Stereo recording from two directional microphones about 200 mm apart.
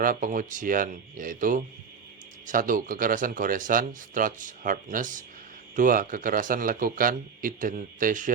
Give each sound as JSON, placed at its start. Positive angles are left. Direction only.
{"t": 0.0, "sound": "speech", "side_deg": -45}